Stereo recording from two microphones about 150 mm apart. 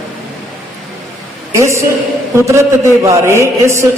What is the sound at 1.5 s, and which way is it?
A man's voice, 20° right (ahead or behind).